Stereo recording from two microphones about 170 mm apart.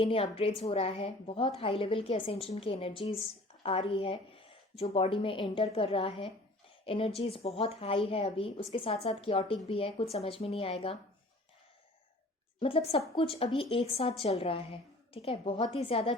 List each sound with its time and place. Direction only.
0.0 s a woman's voice: 35° left (ahead or behind)
12.5 s a woman's voice: 30° left (ahead or behind)